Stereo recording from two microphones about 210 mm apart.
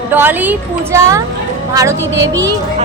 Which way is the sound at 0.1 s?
10° right (ahead or behind).